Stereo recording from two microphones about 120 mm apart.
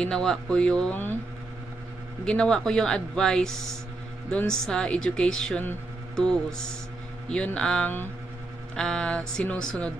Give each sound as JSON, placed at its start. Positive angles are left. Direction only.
{"t": 0.0, "sound": "speech", "side_deg": 5}
{"t": 2.2, "sound": "speech", "side_deg": 5}